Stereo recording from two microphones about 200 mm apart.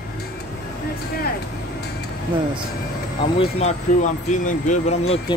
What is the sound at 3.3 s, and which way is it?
Speech, 30° left (ahead or behind).